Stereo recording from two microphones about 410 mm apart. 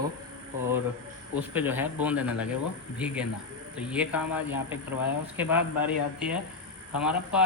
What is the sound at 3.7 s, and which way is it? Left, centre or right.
A man's voice, centre.